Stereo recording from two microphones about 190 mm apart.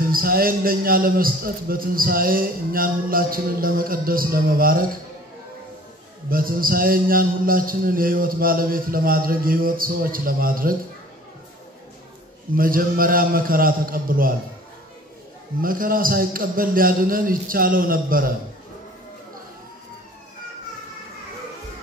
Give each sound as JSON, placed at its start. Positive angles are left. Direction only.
{"t": 0.1, "sound": "a man's voice", "side_deg": -50}
{"t": 6.3, "sound": "a man's voice", "side_deg": -50}
{"t": 12.5, "sound": "a man's voice", "side_deg": -50}
{"t": 15.6, "sound": "a man's voice", "side_deg": -50}